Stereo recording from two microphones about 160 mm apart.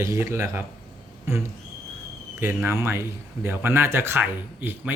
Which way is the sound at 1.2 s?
15° right (ahead or behind).